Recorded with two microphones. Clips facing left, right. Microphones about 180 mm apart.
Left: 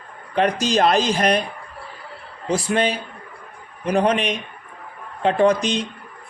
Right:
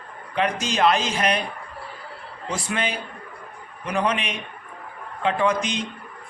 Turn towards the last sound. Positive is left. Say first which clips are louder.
# left 5 dB
turn(degrees=35)  # may be behind; listen again after turning